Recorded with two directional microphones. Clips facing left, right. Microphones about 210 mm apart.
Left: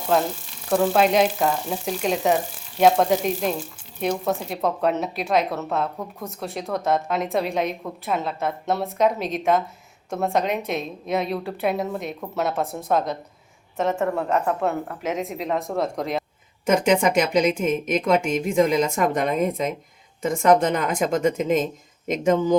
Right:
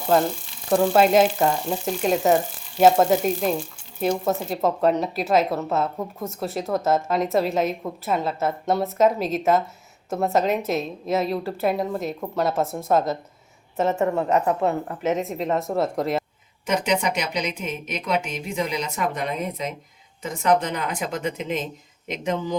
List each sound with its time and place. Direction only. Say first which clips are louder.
0.7 s a woman's voice: right 2 dB; centre (ahead or behind)
16.6 s a woman's voice: left 4 dB; 50° left (ahead or behind)